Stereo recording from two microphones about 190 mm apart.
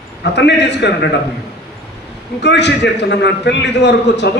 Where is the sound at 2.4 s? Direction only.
65° left (ahead or behind).